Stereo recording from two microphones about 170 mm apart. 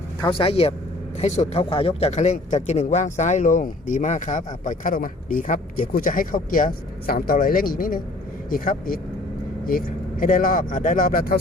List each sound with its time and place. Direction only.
0.2 s a man's voice: 30° left (ahead or behind); by 11.3 s 55° left (ahead or behind)